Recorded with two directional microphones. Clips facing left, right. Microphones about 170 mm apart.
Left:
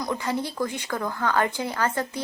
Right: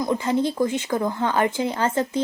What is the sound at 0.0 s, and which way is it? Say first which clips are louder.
A woman's voice: right 6 dB; 25° right (ahead or behind).